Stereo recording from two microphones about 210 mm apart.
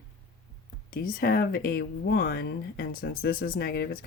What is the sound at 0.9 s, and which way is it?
Speech, 45° left (ahead or behind).